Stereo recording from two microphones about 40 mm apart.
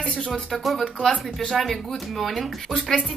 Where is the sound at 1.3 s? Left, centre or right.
Centre.